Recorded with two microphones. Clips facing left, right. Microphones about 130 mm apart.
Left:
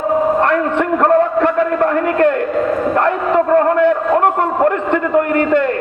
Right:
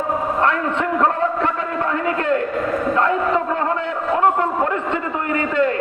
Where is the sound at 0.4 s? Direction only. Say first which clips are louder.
Left 4 dB; 60° left (ahead or behind).